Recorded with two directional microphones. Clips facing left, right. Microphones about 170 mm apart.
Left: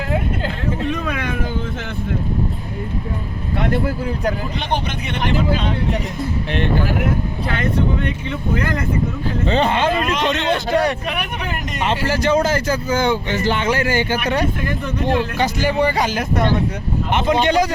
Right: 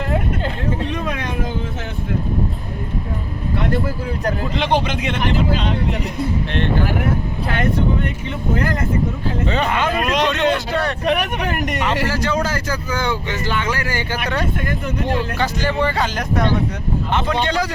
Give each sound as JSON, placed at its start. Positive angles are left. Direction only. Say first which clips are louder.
{"t": 4.6, "sound": "speech", "louder": "right 7 dB", "side_deg": -90}
{"t": 9.5, "sound": "speech", "louder": "left 4 dB", "side_deg": 30}
{"t": 12.1, "sound": "speech", "louder": "left 4 dB", "side_deg": 20}